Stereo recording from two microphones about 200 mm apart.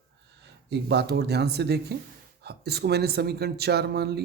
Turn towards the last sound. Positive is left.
turn(degrees=-55)  # may be behind; listen again after turning